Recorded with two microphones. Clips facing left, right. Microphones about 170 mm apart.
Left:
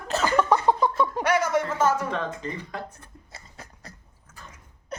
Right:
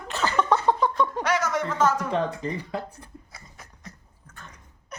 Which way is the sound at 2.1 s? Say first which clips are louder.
Right 4 dB; 30° right (ahead or behind).